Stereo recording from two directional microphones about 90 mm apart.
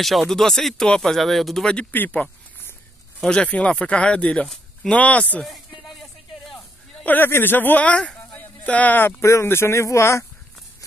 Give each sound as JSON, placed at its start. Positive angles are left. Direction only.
{"t": 0.0, "sound": "speech", "side_deg": 0}
{"t": 1.9, "sound": "speech", "side_deg": 20}
{"t": 5.4, "sound": "a sound", "side_deg": 0}
{"t": 7.1, "sound": "speech", "side_deg": 25}
{"t": 9.2, "sound": "speech", "side_deg": 30}